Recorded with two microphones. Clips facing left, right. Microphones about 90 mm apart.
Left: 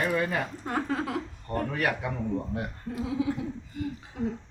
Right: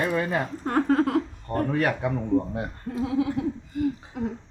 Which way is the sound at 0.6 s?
50° right (ahead or behind).